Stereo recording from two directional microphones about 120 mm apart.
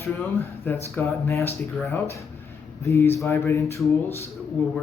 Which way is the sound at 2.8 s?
25° left (ahead or behind).